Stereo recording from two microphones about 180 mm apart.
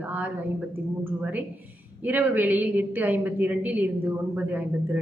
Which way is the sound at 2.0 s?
10° right (ahead or behind).